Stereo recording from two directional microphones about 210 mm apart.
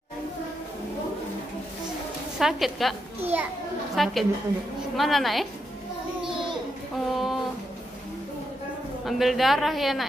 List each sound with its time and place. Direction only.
2.3 s a woman's voice: centre (ahead or behind)
7.1 s a woman's voice: centre (ahead or behind)
9.0 s a woman's voice: centre (ahead or behind)